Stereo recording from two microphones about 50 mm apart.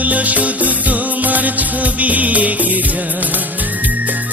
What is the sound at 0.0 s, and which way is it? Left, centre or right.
Music, right.